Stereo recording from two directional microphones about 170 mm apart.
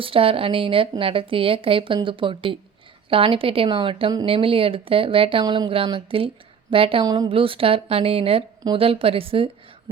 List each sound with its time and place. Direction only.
0.0 s a woman's voice: 35° right (ahead or behind)